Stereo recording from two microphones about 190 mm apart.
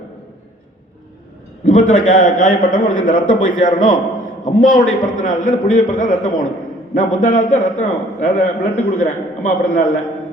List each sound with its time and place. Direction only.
1.6 s a man's voice: 40° left (ahead or behind)